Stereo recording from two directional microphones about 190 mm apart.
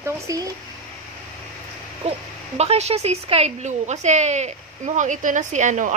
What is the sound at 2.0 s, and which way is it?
Speech, 35° right (ahead or behind).